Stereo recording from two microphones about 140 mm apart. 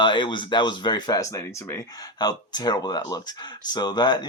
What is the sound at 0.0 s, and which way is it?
Speech, 35° left (ahead or behind).